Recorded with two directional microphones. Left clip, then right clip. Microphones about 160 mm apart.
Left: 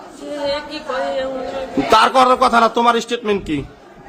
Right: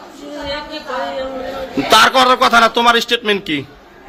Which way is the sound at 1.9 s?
10° left (ahead or behind).